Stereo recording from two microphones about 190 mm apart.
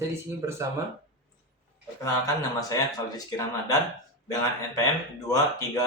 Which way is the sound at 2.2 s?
20° left (ahead or behind).